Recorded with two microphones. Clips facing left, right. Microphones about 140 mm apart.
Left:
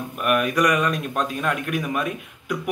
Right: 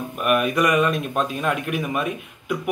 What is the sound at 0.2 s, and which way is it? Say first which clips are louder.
Speech: right 1 dB; 5° right (ahead or behind).